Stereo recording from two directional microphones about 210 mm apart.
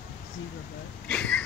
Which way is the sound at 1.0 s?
5° left (ahead or behind).